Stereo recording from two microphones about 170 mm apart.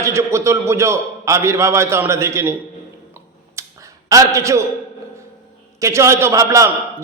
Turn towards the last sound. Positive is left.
turn(degrees=-20)  # may be behind; listen again after turning